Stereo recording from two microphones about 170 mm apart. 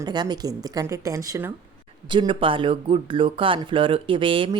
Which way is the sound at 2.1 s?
30° right (ahead or behind).